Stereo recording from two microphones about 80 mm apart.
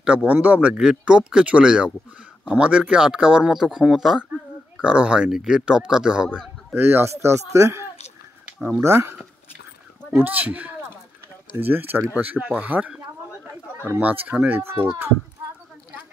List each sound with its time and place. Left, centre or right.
0.3 s speech: centre
6.7 s speech: right
10.1 s speech: right